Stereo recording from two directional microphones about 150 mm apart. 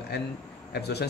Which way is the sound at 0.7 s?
90° left.